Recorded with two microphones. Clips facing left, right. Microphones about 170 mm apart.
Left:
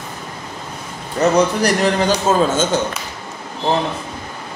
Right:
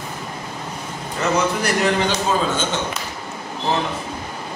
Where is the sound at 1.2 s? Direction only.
40° left (ahead or behind).